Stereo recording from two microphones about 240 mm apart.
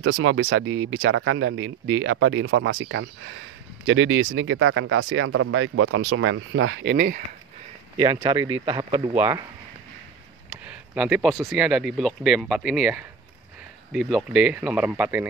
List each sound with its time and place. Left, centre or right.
0.0 s speech: right
8.0 s speech: centre
10.5 s speech: centre